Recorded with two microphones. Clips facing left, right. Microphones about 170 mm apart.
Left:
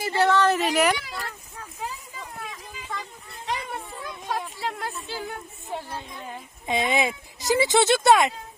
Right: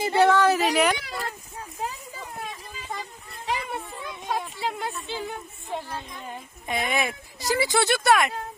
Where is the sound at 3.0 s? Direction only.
5° right (ahead or behind).